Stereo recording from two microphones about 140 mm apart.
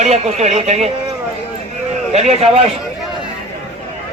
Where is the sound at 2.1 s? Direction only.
50° right (ahead or behind).